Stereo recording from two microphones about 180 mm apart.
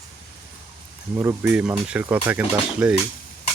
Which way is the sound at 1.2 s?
10° right (ahead or behind).